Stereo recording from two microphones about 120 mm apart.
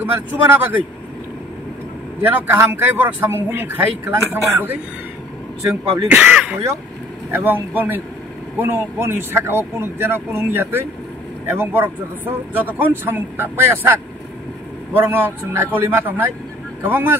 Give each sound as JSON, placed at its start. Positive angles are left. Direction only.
{"t": 0.0, "sound": "a man's voice", "side_deg": -15}
{"t": 2.2, "sound": "a man's voice", "side_deg": -15}
{"t": 6.0, "sound": "a man's voice", "side_deg": -10}
{"t": 15.0, "sound": "a man's voice", "side_deg": -20}